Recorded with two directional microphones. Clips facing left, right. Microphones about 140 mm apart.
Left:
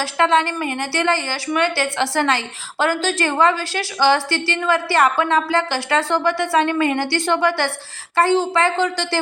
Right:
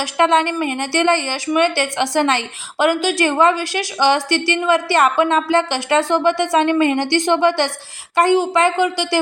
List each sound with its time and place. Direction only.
0.0 s a woman's voice: 20° right (ahead or behind)